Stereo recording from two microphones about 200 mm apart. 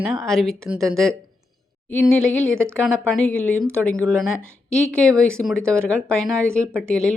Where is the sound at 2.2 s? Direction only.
85° left.